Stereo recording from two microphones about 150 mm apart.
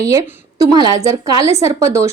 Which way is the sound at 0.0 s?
20° right (ahead or behind).